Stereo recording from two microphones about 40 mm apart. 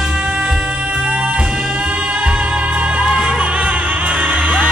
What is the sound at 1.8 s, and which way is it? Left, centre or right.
Music, right.